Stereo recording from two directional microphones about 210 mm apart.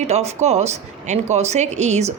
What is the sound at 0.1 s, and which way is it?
A woman's voice, 30° right (ahead or behind).